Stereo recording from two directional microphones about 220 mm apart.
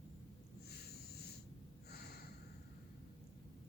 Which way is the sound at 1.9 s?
45° left (ahead or behind).